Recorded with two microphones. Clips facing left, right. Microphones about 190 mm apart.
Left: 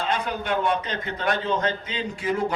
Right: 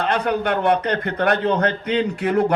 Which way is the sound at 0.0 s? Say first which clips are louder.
Right 7 dB; 65° right (ahead or behind).